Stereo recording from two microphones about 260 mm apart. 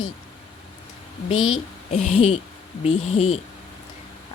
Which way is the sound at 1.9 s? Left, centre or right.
Left.